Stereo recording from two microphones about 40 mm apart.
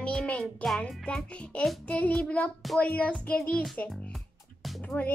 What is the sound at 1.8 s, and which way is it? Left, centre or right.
Speech, left.